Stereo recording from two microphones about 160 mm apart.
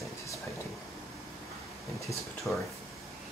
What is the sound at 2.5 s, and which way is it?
Speech, 5° left (ahead or behind).